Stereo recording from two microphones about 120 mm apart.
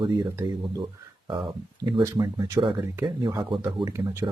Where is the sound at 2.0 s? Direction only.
30° right (ahead or behind).